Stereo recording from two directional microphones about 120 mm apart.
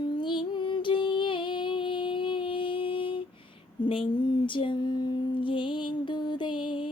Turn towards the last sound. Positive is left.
turn(degrees=40)  # may be behind; listen again after turning